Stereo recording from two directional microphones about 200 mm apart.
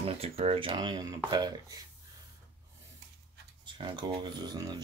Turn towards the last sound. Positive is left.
turn(degrees=-20)  # may be behind; listen again after turning